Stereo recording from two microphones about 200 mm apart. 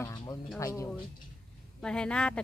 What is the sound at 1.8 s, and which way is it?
Speech, 5° left (ahead or behind).